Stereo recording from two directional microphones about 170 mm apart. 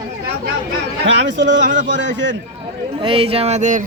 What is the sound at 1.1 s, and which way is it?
Speech, 90° right.